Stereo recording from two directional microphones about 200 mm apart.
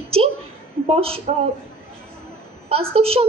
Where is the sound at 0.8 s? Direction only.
30° right (ahead or behind).